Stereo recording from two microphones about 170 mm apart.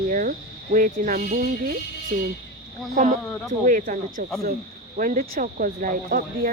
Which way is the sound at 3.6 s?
50° right (ahead or behind).